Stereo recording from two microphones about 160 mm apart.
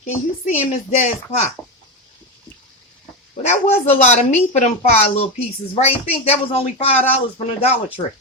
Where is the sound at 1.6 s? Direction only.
15° left (ahead or behind).